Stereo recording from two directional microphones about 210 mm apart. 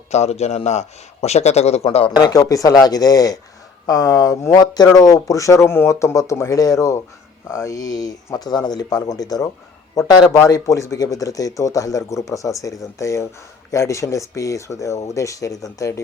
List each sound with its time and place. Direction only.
0.1 s a man's voice: 30° left (ahead or behind)
2.1 s speech: 20° left (ahead or behind)